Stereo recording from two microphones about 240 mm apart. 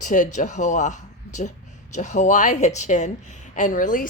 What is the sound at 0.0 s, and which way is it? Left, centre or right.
Speech, left.